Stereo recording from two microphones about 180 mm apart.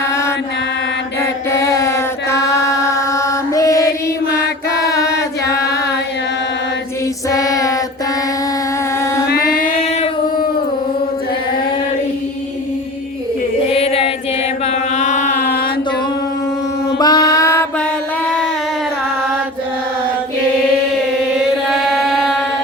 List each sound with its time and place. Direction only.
0.0 s mantra: 15° left (ahead or behind)
1.2 s chant: 15° left (ahead or behind)
4.7 s choir: 20° left (ahead or behind)
7.3 s a sound: 20° left (ahead or behind)
9.3 s music: 55° left (ahead or behind)
9.8 s singing: 35° left (ahead or behind)
13.7 s singing: 35° left (ahead or behind)
14.7 s chant: 40° left (ahead or behind)
15.4 s mantra: 60° left (ahead or behind)
17.0 s mantra: 20° left (ahead or behind)
21.7 s a sound: centre (ahead or behind)